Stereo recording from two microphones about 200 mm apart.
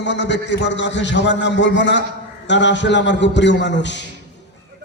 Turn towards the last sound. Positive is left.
turn(degrees=60)  # may be behind; listen again after turning